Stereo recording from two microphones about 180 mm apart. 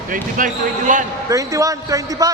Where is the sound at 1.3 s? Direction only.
20° right (ahead or behind).